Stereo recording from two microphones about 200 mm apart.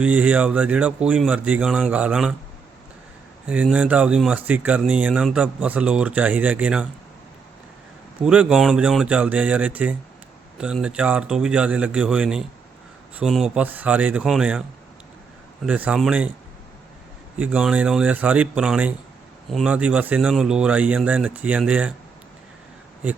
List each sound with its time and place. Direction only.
0.0 s speech: 5° right (ahead or behind)
3.4 s speech: 5° right (ahead or behind)
8.2 s a man's voice: 5° right (ahead or behind)
15.6 s a man's voice: 5° right (ahead or behind)
17.3 s speech: 10° right (ahead or behind)